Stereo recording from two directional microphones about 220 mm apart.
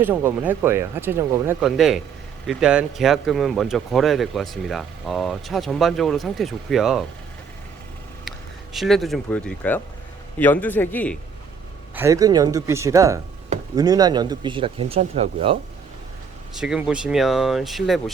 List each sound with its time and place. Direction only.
0.0 s speech: 10° right (ahead or behind)
8.7 s a man's voice: centre (ahead or behind)
11.9 s speech: 15° right (ahead or behind)
16.6 s speech: 5° right (ahead or behind)